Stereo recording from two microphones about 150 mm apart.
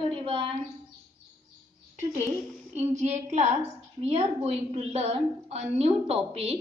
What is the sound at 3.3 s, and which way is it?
A woman's voice, 45° right (ahead or behind).